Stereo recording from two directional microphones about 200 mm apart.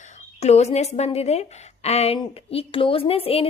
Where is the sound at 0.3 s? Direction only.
30° left (ahead or behind).